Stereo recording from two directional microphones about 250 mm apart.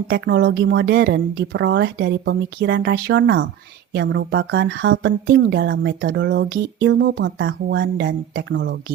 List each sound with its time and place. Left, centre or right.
0.1 s speech: right